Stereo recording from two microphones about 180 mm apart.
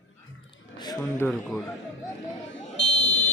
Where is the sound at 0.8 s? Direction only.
15° left (ahead or behind); by 1.6 s centre (ahead or behind).